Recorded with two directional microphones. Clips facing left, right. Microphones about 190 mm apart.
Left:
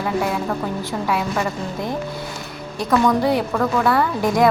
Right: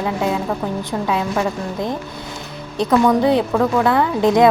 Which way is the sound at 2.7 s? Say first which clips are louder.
Right 3 dB; 20° right (ahead or behind).